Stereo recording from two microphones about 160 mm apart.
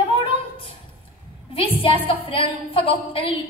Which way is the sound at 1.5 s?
35° left (ahead or behind).